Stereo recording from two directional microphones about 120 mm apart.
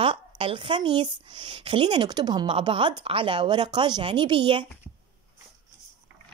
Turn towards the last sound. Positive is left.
turn(degrees=-45)  # may be behind; listen again after turning